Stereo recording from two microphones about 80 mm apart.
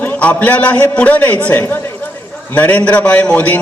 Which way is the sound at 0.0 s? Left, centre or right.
Centre.